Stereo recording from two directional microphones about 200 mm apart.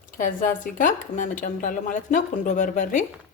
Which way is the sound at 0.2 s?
40° left (ahead or behind).